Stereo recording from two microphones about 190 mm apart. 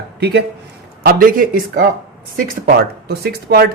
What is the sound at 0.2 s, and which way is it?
Speech, 60° right (ahead or behind).